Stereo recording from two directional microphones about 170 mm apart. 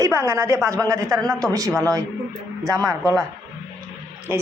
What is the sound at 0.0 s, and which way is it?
A woman's voice, 15° right (ahead or behind).